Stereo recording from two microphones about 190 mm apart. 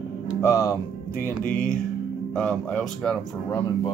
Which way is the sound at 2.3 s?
5° left (ahead or behind).